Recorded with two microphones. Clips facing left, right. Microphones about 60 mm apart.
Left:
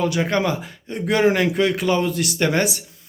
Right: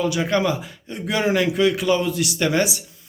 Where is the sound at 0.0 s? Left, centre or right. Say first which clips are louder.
Even; left.